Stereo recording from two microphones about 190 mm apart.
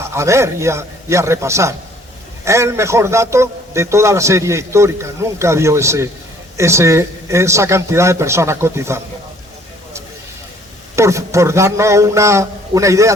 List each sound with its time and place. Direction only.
0.0 s a man's voice: 15° right (ahead or behind)
10.9 s a man's voice: 15° right (ahead or behind)